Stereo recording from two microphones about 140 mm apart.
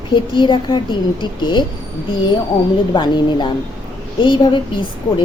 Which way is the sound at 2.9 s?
30° left (ahead or behind).